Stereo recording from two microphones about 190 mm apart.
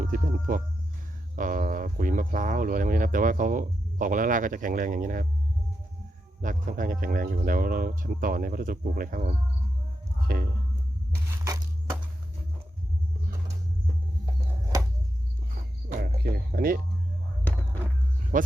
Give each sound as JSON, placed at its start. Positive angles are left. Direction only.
{"t": 0.0, "sound": "speech", "side_deg": -45}
{"t": 6.4, "sound": "speech", "side_deg": -45}
{"t": 15.9, "sound": "music", "side_deg": -50}
{"t": 18.3, "sound": "speech", "side_deg": -45}